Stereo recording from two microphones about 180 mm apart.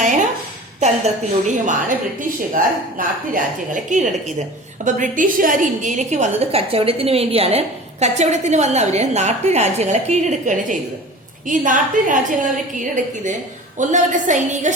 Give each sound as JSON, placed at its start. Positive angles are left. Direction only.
{"t": 0.0, "sound": "a sound", "side_deg": -45}
{"t": 0.8, "sound": "a woman's voice", "side_deg": -40}
{"t": 3.3, "sound": "a woman's voice", "side_deg": -45}